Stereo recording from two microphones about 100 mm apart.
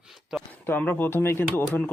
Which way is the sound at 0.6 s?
20° left (ahead or behind).